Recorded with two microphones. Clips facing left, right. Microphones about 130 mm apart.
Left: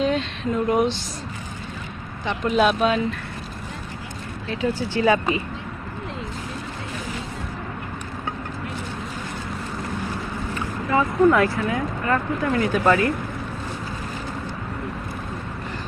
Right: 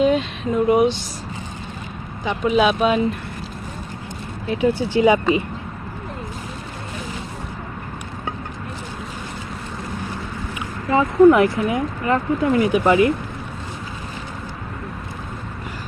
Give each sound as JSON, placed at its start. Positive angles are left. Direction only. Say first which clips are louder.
{"t": 0.0, "sound": "a sound", "louder": "right 5 dB", "side_deg": -10}
{"t": 0.7, "sound": "speech", "louder": "right 5 dB", "side_deg": -5}
{"t": 2.2, "sound": "speech", "louder": "right 2 dB", "side_deg": -5}
{"t": 4.4, "sound": "speech", "louder": "right 5 dB", "side_deg": -15}
{"t": 10.9, "sound": "speech", "louder": "right 5 dB", "side_deg": -20}